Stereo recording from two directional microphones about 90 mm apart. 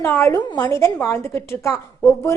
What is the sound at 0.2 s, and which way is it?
A woman's voice, 30° left (ahead or behind).